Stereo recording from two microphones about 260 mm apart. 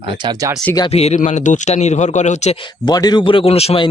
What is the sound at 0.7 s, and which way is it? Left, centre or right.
Speech, centre.